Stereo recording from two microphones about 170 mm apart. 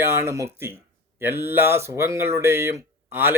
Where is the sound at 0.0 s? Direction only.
15° right (ahead or behind).